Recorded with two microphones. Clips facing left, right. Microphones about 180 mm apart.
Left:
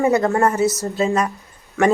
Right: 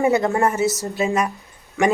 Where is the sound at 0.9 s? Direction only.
15° right (ahead or behind).